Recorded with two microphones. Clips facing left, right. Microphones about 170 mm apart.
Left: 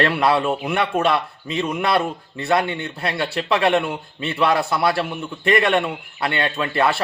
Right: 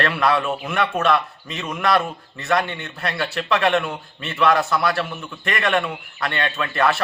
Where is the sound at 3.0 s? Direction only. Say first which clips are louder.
Left 1 dB; 30° left (ahead or behind).